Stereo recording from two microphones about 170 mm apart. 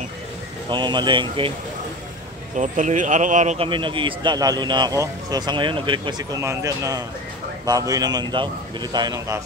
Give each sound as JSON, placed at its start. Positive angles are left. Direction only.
{"t": 0.7, "sound": "a man's voice", "side_deg": -25}
{"t": 2.5, "sound": "a man's voice", "side_deg": -50}